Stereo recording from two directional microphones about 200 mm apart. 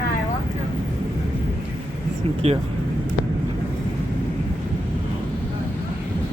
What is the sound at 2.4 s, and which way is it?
Speech, 30° right (ahead or behind).